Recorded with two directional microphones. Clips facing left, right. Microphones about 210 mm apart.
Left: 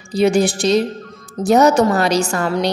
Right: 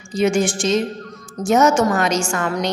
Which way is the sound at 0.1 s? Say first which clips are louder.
Left 3 dB; 35° left (ahead or behind).